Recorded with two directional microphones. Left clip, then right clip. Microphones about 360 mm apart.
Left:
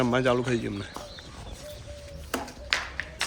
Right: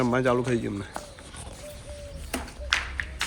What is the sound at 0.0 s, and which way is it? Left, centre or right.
Speech, centre.